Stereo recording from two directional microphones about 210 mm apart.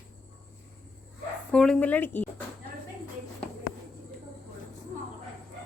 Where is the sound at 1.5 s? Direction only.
5° left (ahead or behind).